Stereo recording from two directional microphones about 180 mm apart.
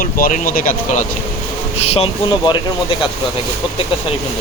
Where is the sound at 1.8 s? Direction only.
35° left (ahead or behind).